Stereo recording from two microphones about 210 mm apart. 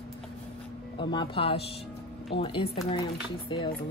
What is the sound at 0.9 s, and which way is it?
Speech, 25° left (ahead or behind).